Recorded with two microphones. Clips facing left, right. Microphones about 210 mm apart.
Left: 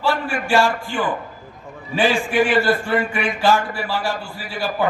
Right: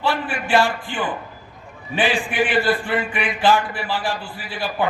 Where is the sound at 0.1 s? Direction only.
45° left (ahead or behind).